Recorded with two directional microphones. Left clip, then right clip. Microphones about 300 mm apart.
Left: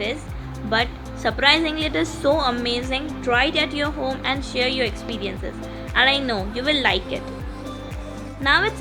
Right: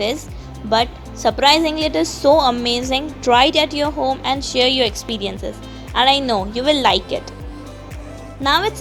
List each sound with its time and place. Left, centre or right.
0.7 s a woman's voice: centre
2.0 s a woman's voice: centre
2.4 s a woman's voice: centre
8.4 s a woman's voice: centre